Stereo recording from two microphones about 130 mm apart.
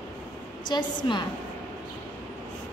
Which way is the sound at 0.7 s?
35° left (ahead or behind).